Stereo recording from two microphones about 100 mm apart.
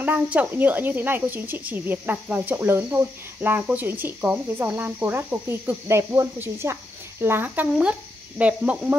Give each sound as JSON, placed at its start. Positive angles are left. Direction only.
{"t": 0.0, "sound": "speech", "side_deg": -15}